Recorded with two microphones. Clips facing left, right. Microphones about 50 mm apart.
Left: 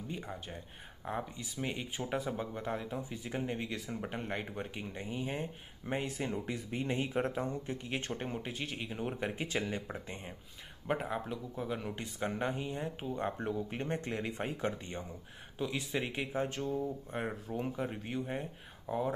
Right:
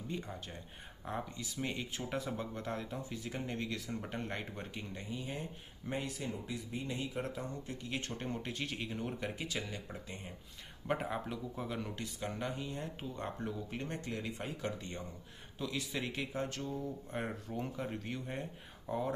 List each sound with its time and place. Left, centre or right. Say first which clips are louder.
0.1 s speech: right 1 dB; centre
5.0 s speech: left 5 dB; left
8.1 s speech: left 2 dB; centre
9.2 s speech: left 4 dB; left
10.9 s speech: left 1 dB; centre
11.9 s speech: left 4 dB; left
14.8 s speech: left 2 dB; left
17.1 s speech: left 2 dB; centre